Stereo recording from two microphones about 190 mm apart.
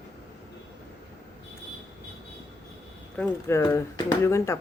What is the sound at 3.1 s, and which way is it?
Speech, 10° left (ahead or behind).